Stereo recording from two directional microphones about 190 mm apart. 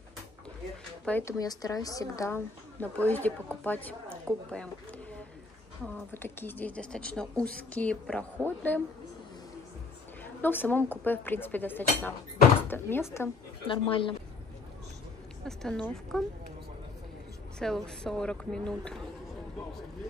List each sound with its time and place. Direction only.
1.0 s speech: 10° left (ahead or behind)
1.4 s a woman's voice: 20° left (ahead or behind)
6.1 s a woman's voice: 10° left (ahead or behind)
10.2 s a woman's voice: 10° left (ahead or behind)
13.7 s speech: 25° left (ahead or behind)
15.4 s speech: centre (ahead or behind)
17.6 s speech: 5° left (ahead or behind)